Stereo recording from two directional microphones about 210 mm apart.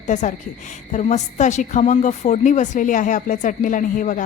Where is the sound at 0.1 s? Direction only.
35° left (ahead or behind).